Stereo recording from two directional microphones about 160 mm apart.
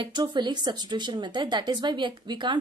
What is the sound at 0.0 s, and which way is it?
Speech, 30° right (ahead or behind).